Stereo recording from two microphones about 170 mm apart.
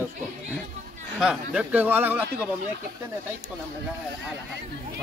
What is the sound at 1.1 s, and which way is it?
Speech, 5° right (ahead or behind).